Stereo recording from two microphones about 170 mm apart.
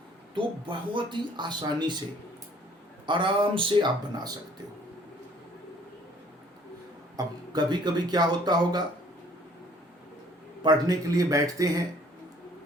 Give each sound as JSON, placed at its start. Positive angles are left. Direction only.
{"t": 0.3, "sound": "speech", "side_deg": -30}
{"t": 3.1, "sound": "speech", "side_deg": -30}
{"t": 7.2, "sound": "speech", "side_deg": -25}
{"t": 10.6, "sound": "speech", "side_deg": -20}